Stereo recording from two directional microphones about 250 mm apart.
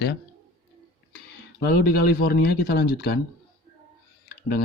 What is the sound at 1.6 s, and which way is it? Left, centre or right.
Speech, left.